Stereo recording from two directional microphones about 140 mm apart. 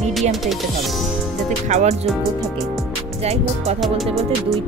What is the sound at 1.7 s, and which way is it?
Speech, 55° right (ahead or behind).